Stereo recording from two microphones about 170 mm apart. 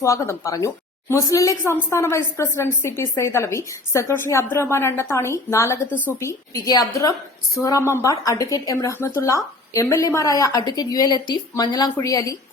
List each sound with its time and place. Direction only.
0.0 s a woman's voice: 15° left (ahead or behind)